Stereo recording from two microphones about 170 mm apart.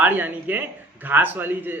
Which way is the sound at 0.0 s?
10° right (ahead or behind).